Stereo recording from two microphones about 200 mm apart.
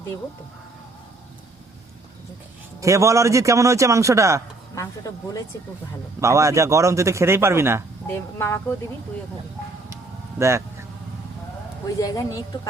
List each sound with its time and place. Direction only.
2.8 s a man's voice: 15° right (ahead or behind)
4.7 s speech: 15° left (ahead or behind)
6.1 s a man's voice: 15° right (ahead or behind)
8.0 s speech: 15° left (ahead or behind)
9.9 s music: 15° right (ahead or behind)
11.9 s speech: 20° left (ahead or behind)